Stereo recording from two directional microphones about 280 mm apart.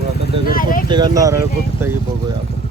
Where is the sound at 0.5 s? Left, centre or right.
Left.